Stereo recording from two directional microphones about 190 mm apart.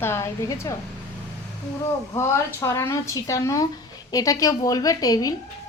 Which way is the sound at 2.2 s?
15° left (ahead or behind).